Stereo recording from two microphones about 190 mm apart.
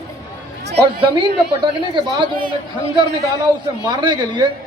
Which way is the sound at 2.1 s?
25° right (ahead or behind).